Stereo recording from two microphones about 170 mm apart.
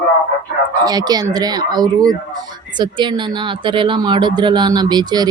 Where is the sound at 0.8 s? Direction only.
25° right (ahead or behind).